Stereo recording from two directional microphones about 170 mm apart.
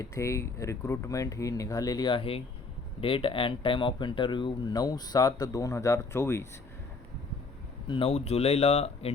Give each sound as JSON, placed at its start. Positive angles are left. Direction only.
{"t": 0.0, "sound": "speech", "side_deg": 15}
{"t": 7.9, "sound": "speech", "side_deg": 30}